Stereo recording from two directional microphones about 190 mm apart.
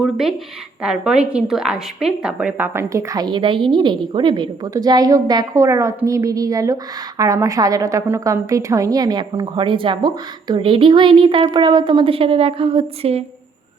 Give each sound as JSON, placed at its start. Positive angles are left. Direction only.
{"t": 0.0, "sound": "a woman's voice", "side_deg": 0}